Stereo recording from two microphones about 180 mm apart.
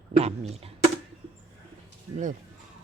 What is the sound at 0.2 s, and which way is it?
Speech, 35° right (ahead or behind).